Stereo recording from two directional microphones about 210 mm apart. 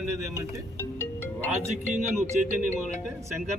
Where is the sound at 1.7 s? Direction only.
35° right (ahead or behind).